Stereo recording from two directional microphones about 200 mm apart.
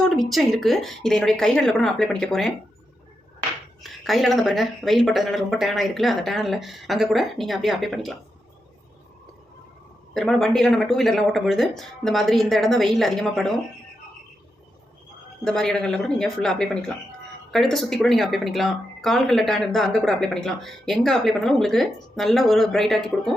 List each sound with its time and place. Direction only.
0.0 s speech: centre (ahead or behind)
3.8 s speech: centre (ahead or behind)
10.2 s speech: centre (ahead or behind)
15.4 s speech: centre (ahead or behind)